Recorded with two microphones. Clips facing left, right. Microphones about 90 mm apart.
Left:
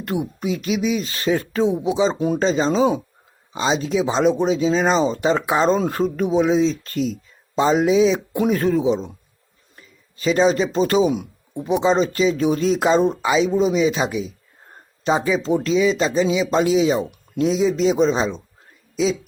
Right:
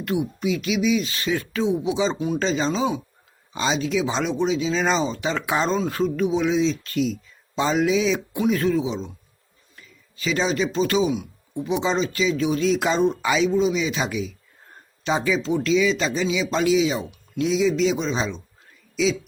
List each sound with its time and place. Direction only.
0.0 s speech: 40° left (ahead or behind)
3.5 s speech: 30° left (ahead or behind); by 11.3 s 45° left (ahead or behind)
11.6 s speech: 30° left (ahead or behind)